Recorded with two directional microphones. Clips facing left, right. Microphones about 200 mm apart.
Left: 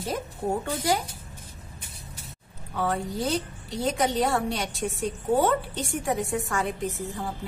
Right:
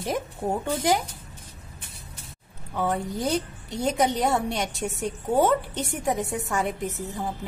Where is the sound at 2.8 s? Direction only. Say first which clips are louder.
Right 1 dB; 20° right (ahead or behind).